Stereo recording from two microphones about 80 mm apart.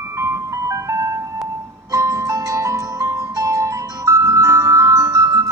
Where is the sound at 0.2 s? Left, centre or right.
Right.